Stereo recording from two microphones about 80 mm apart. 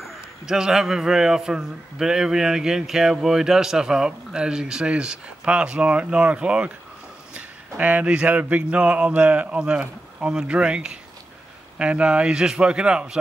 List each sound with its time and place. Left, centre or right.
0.0 s a man's voice: centre